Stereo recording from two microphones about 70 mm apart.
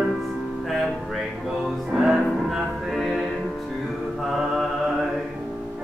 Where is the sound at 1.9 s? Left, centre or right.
Centre.